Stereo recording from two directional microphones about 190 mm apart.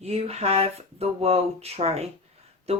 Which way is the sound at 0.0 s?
30° right (ahead or behind).